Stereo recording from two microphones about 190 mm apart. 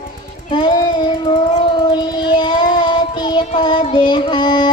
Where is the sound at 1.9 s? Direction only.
25° left (ahead or behind).